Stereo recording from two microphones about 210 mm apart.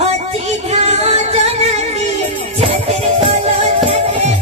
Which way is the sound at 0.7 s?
30° right (ahead or behind).